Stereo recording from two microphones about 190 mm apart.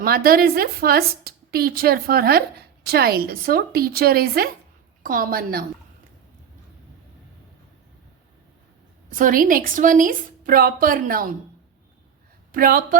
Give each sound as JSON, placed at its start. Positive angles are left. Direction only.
{"t": 0.0, "sound": "a woman's voice", "side_deg": -50}
{"t": 9.1, "sound": "a woman's voice", "side_deg": -45}
{"t": 12.5, "sound": "a woman's voice", "side_deg": -50}